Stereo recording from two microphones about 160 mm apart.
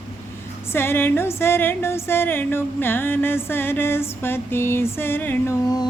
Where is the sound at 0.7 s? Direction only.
15° left (ahead or behind).